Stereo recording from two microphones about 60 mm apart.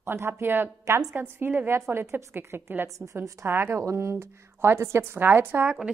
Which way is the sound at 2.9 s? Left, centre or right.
Right.